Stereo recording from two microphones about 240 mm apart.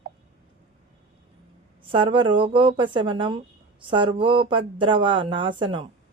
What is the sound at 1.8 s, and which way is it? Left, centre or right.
Speech, right.